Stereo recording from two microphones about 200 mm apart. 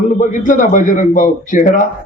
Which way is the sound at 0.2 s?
40° left (ahead or behind).